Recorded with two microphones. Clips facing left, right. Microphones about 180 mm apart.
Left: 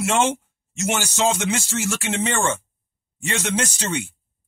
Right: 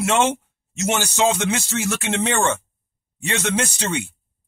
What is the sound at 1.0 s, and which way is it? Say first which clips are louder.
Speech: right 2 dB; 60° right (ahead or behind).